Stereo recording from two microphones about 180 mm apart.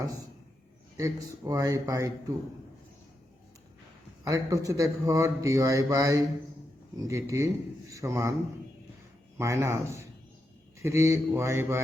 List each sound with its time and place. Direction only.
0.9 s a man's voice: 20° right (ahead or behind)
4.2 s a man's voice: 20° right (ahead or behind)
9.4 s a man's voice: 15° right (ahead or behind)